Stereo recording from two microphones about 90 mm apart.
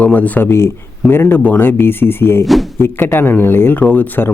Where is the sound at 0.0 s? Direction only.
20° left (ahead or behind).